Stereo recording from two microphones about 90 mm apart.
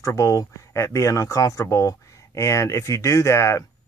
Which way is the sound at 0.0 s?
35° left (ahead or behind).